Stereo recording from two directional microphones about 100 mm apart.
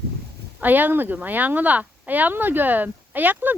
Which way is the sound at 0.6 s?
20° right (ahead or behind).